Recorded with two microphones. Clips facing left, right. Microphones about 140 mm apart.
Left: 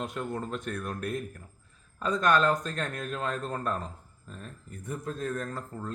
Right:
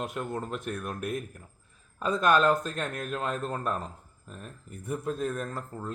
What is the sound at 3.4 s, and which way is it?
A man's voice, centre (ahead or behind).